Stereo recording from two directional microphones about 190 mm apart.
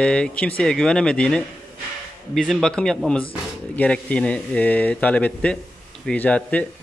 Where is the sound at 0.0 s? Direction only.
5° left (ahead or behind).